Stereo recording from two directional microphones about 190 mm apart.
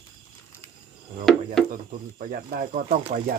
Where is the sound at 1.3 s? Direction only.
5° left (ahead or behind).